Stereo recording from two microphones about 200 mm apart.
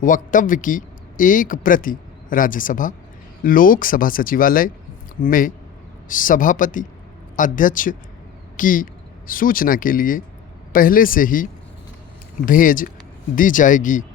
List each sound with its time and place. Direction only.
0.0 s a man's voice: 40° left (ahead or behind)
12.5 s a man's voice: 45° left (ahead or behind)